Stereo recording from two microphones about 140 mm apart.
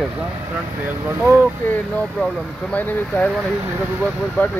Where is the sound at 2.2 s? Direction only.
10° left (ahead or behind).